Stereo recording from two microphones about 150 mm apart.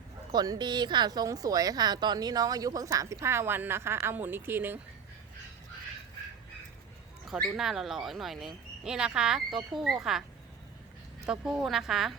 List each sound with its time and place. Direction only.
0.3 s speech: 25° right (ahead or behind)
7.3 s speech: centre (ahead or behind)
11.3 s speech: 5° right (ahead or behind)